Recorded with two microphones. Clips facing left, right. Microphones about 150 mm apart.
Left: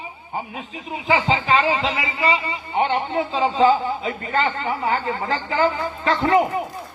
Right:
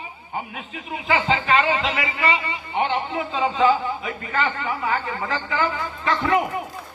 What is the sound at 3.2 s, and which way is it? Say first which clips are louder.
A man's voice: left 3 dB; 30° left (ahead or behind).